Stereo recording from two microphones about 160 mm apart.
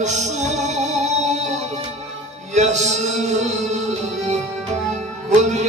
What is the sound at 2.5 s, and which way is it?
Music, 45° right (ahead or behind).